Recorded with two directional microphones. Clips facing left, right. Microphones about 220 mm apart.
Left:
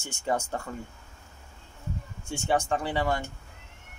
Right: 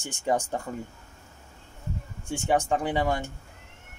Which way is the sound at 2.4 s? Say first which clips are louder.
Right 2 dB; 15° right (ahead or behind).